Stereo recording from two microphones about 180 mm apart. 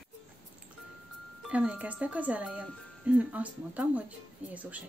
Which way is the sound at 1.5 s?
5° right (ahead or behind).